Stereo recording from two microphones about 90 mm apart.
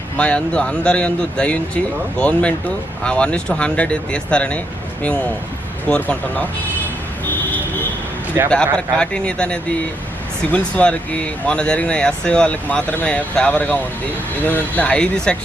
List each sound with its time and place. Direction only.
0.2 s speech: 15° left (ahead or behind)
5.9 s speech: 15° left (ahead or behind)
8.4 s speech: 35° right (ahead or behind)
8.7 s speech: 10° left (ahead or behind)